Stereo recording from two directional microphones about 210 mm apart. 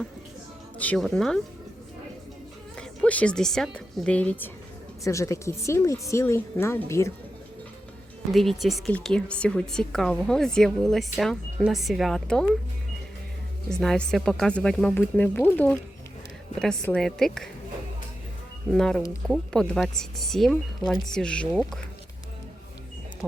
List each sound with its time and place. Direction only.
0.8 s speech: 5° left (ahead or behind)
2.7 s a woman's voice: 5° left (ahead or behind)
8.3 s speech: centre (ahead or behind)
13.7 s speech: 5° left (ahead or behind)
18.7 s speech: centre (ahead or behind)